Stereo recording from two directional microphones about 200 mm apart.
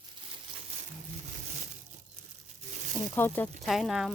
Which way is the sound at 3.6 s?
Centre (ahead or behind).